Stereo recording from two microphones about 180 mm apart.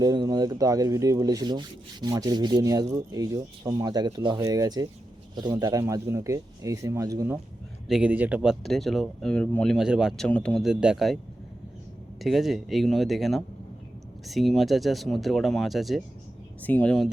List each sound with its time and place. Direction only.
0.0 s speech: 20° right (ahead or behind)
7.9 s speech: 5° right (ahead or behind)
12.2 s speech: centre (ahead or behind)